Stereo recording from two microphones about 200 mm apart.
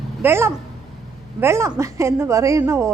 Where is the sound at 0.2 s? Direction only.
10° right (ahead or behind).